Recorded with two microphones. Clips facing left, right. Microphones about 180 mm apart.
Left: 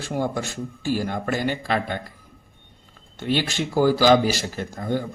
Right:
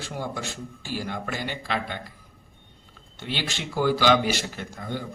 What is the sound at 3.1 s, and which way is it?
A man's voice, 45° left (ahead or behind).